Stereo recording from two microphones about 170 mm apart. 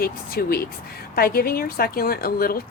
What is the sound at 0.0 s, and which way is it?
A woman's voice, 60° left (ahead or behind).